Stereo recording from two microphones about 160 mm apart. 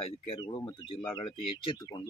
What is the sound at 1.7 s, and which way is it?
Speech, 20° left (ahead or behind).